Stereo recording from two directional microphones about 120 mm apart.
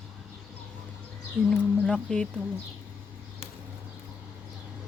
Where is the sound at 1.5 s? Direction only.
5° left (ahead or behind).